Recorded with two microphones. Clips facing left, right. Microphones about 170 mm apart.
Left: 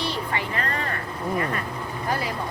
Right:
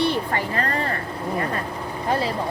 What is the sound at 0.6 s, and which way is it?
Speech, 35° right (ahead or behind).